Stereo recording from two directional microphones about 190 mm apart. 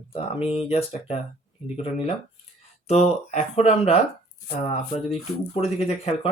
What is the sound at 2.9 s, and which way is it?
Speech, 35° left (ahead or behind).